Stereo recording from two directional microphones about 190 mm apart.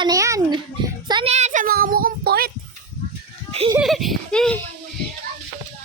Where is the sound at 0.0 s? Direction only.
15° right (ahead or behind).